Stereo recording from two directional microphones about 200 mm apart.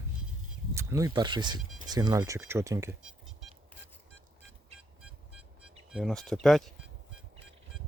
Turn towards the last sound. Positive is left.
turn(degrees=0)  # may be behind; listen again after turning